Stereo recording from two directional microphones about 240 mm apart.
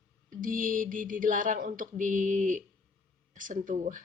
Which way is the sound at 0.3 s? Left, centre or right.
Right.